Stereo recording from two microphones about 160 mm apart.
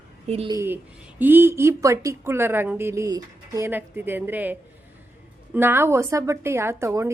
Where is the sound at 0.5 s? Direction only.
15° right (ahead or behind).